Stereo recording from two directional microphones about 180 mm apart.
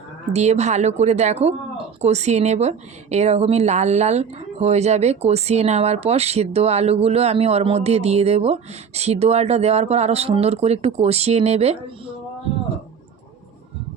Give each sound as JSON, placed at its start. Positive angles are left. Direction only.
{"t": 0.3, "sound": "a woman's voice", "side_deg": -40}